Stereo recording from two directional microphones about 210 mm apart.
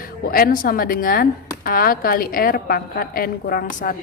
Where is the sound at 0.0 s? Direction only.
45° left (ahead or behind).